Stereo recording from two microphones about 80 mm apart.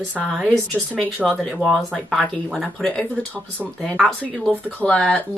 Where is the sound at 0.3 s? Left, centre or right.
Centre.